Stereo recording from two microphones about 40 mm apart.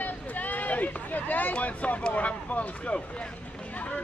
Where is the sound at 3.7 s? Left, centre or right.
Left.